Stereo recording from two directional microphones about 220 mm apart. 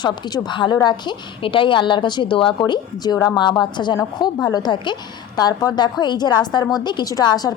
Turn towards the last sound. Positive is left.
turn(degrees=20)  # may be behind; listen again after turning